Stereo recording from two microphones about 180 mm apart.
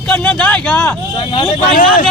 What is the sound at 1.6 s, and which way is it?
Speech, 50° left (ahead or behind).